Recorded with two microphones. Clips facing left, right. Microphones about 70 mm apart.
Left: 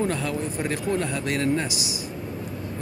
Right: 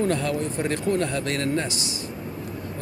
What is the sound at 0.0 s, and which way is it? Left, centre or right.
Speech, centre.